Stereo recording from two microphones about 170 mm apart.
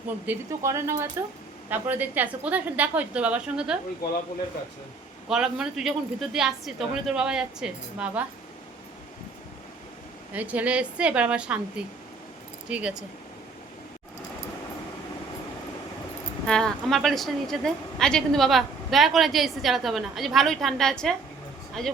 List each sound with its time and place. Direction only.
0.3 s a woman's voice: 15° right (ahead or behind)
5.3 s a woman's voice: 5° right (ahead or behind)
10.3 s a woman's voice: 10° right (ahead or behind)
12.6 s a woman's voice: 5° right (ahead or behind)
16.5 s a woman's voice: 5° left (ahead or behind)